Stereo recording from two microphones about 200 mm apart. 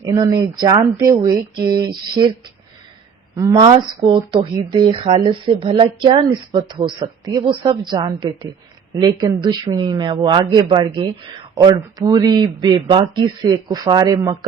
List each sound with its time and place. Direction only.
0.0 s speech: 20° right (ahead or behind)
3.3 s speech: 20° right (ahead or behind)